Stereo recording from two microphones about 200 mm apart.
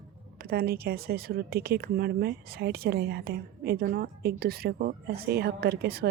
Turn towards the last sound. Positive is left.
turn(degrees=-50)  # may be behind; listen again after turning